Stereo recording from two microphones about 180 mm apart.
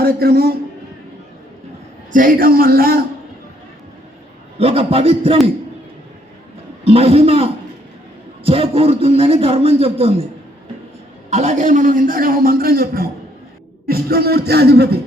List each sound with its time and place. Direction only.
0.0 s speech: 55° right (ahead or behind)
2.1 s a man's voice: 50° right (ahead or behind)
4.5 s a man's voice: 30° right (ahead or behind)
6.8 s a man's voice: 35° right (ahead or behind)
11.3 s a man's voice: 40° right (ahead or behind); by 14.9 s 60° right (ahead or behind)